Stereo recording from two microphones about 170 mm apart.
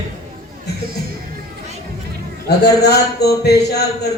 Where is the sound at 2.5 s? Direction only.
70° left (ahead or behind).